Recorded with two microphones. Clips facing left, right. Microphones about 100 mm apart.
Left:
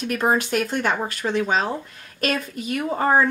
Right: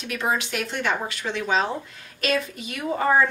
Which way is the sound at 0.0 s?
45° left (ahead or behind).